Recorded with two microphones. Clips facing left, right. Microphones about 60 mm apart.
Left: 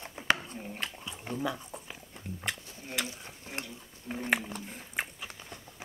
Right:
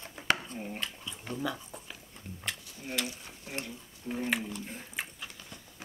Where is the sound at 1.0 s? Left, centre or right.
Centre.